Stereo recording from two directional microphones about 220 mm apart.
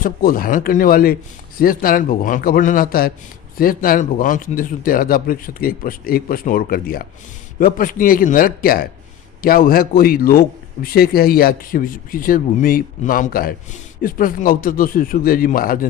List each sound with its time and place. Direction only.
0.0 s a man's voice: 40° left (ahead or behind)